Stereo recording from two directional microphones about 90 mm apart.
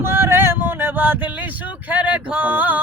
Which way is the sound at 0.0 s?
25° right (ahead or behind).